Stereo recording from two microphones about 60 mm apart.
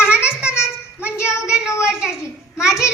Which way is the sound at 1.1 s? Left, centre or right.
Left.